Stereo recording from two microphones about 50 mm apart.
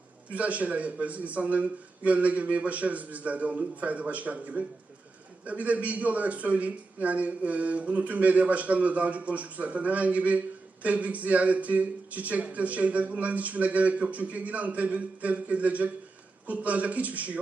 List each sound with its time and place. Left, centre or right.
0.3 s speech: right